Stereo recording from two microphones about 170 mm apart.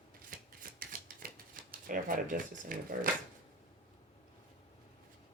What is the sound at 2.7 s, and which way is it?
Speech, 50° right (ahead or behind).